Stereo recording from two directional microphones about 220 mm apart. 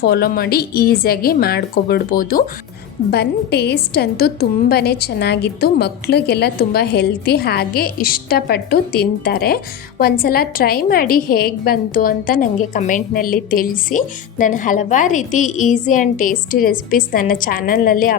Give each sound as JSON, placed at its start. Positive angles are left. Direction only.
{"t": 0.0, "sound": "a woman's voice", "side_deg": 45}